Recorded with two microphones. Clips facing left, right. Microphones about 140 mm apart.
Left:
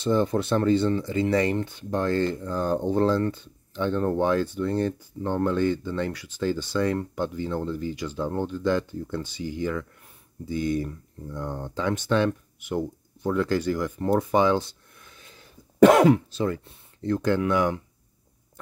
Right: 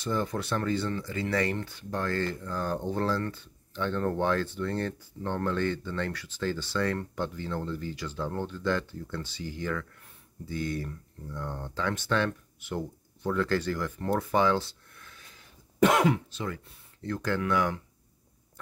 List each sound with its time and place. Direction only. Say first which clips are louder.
0.0 s speech: left 8 dB; 25° left (ahead or behind)
15.9 s speech: left 8 dB; 40° left (ahead or behind); by 17.7 s 20° left (ahead or behind)